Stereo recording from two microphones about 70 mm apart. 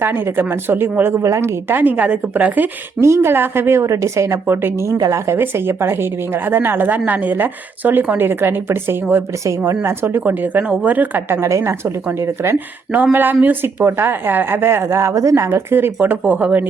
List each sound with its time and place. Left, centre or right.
0.0 s a woman's voice: right
3.0 s speech: right
4.9 s a woman's voice: right
5.3 s a woman's voice: right
9.5 s a woman's voice: right
11.3 s a woman's voice: right
12.5 s speech: right
15.4 s a woman's voice: right